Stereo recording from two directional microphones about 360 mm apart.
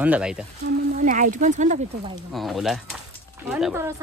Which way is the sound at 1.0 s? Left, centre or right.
Right.